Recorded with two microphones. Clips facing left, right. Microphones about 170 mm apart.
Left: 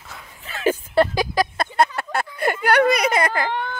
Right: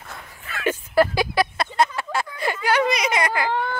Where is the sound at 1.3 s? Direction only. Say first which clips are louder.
Even; 40° left (ahead or behind).